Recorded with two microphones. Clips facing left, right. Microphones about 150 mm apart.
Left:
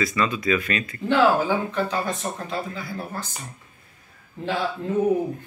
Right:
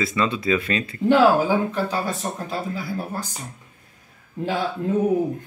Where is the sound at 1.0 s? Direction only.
10° right (ahead or behind).